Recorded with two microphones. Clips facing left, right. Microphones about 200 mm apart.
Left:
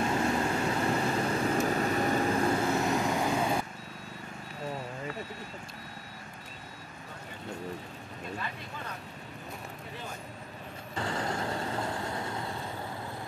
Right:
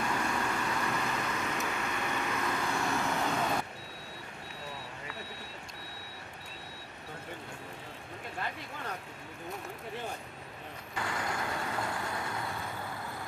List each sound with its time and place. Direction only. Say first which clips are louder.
0.0 s vehicle: left 5 dB; 25° left (ahead or behind); by 3.5 s 10° left (ahead or behind)
11.0 s vehicle: left 3 dB; 30° left (ahead or behind)